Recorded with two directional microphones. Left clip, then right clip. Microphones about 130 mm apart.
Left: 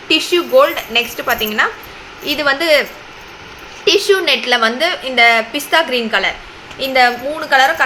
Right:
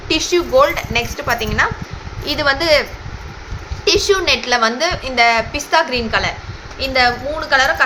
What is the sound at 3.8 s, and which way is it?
A woman's voice, 30° left (ahead or behind).